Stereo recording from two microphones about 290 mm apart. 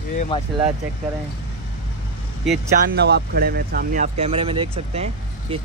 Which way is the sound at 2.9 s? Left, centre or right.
Right.